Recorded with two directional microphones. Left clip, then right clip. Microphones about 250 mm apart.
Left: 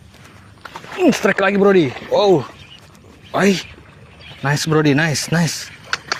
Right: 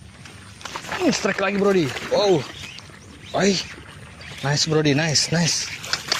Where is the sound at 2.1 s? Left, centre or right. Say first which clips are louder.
Left 5 dB; left.